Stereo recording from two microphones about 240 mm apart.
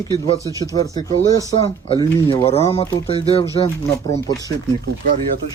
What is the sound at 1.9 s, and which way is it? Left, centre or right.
Speech, centre.